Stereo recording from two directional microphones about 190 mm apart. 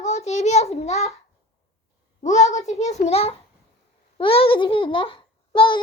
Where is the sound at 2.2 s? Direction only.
40° left (ahead or behind).